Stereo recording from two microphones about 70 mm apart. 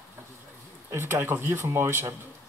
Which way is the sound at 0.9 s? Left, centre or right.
Right.